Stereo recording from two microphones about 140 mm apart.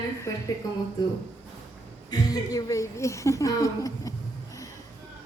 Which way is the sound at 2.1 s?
25° left (ahead or behind).